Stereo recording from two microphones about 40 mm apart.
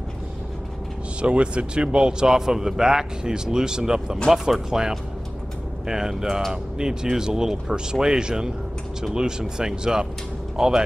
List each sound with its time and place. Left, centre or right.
1.2 s speech: right